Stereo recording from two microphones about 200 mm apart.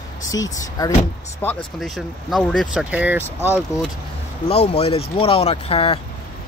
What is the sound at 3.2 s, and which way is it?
Speech, 10° left (ahead or behind).